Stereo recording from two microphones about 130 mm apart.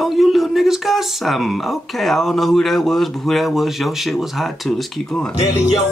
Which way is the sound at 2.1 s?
Centre (ahead or behind).